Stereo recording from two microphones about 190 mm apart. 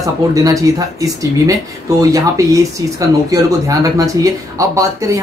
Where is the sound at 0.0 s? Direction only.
20° right (ahead or behind).